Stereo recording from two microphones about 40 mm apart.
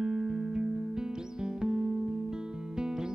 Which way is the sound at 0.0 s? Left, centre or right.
Centre.